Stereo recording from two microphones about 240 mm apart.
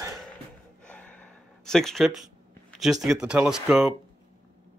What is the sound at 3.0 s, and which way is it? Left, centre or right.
Speech, centre.